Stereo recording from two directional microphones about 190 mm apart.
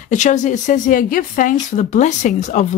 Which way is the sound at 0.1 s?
40° left (ahead or behind).